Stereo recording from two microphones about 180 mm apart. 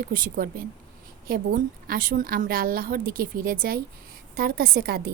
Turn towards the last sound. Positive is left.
turn(degrees=-60)  # may be behind; listen again after turning